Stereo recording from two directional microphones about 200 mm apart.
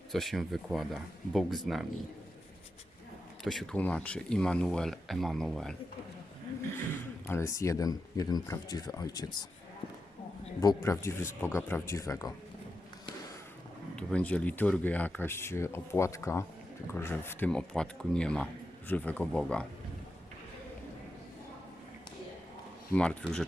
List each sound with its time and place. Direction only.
0.1 s speech: centre (ahead or behind)
3.4 s speech: centre (ahead or behind)
7.3 s speech: 15° left (ahead or behind)
10.6 s speech: 15° left (ahead or behind)
13.9 s speech: 5° left (ahead or behind)
22.9 s speech: 5° left (ahead or behind)